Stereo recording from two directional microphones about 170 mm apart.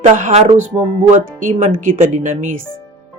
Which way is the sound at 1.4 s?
50° right (ahead or behind).